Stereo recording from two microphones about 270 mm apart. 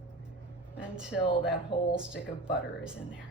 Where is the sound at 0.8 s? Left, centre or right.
Centre.